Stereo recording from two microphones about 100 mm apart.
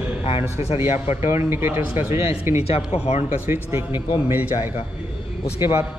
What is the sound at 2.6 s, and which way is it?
Speech, 90° left.